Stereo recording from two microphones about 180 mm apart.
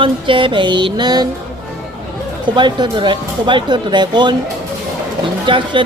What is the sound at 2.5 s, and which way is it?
Speech, 25° right (ahead or behind).